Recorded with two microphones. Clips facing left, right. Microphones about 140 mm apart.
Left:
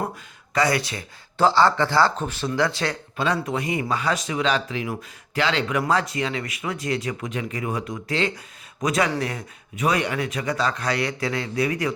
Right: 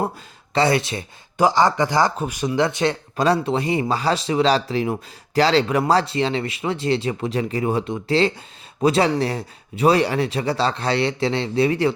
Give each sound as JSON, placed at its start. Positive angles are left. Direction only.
{"t": 0.5, "sound": "speech", "side_deg": -25}
{"t": 3.2, "sound": "speech", "side_deg": -35}